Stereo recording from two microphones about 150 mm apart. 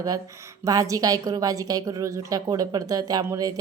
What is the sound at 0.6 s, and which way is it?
A woman's voice, 25° right (ahead or behind).